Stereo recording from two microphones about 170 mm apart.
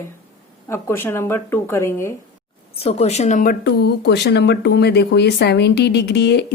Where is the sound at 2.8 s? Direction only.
35° left (ahead or behind).